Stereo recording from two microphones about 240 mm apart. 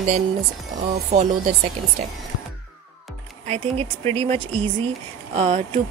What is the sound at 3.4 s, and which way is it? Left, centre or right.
Speech, right.